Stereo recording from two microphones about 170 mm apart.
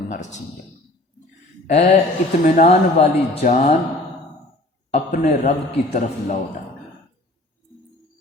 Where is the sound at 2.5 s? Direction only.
40° left (ahead or behind).